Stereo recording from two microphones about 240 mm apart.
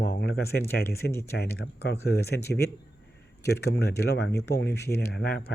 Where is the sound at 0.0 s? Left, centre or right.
Left.